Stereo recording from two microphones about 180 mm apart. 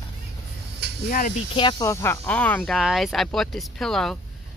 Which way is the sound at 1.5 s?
25° left (ahead or behind).